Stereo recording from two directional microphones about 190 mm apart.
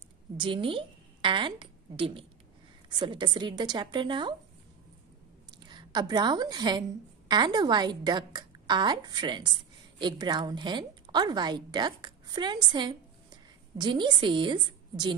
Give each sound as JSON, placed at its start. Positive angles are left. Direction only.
{"t": 0.4, "sound": "a woman's voice", "side_deg": -25}
{"t": 5.6, "sound": "a woman's voice", "side_deg": -25}